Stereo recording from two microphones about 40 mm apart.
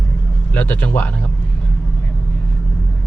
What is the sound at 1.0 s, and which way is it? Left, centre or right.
Speech, left.